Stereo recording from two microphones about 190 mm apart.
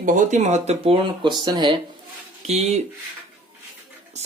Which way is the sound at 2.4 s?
35° right (ahead or behind).